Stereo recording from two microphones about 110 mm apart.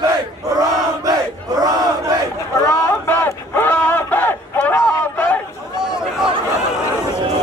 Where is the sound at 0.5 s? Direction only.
35° right (ahead or behind).